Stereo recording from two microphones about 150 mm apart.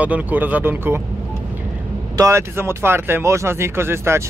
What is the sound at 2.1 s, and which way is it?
Speech, 20° right (ahead or behind).